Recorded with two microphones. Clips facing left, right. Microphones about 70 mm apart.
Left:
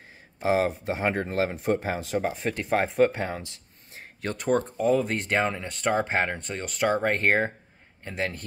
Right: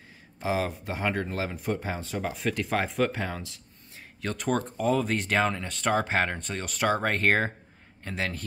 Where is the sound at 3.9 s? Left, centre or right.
Left.